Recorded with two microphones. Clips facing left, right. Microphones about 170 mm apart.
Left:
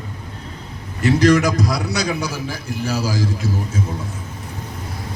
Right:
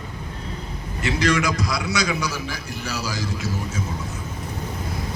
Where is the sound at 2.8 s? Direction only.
55° left (ahead or behind).